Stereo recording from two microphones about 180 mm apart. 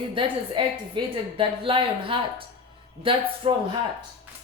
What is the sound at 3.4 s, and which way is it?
Speech, 30° right (ahead or behind).